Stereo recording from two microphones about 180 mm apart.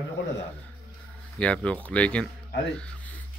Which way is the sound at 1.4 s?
5° left (ahead or behind).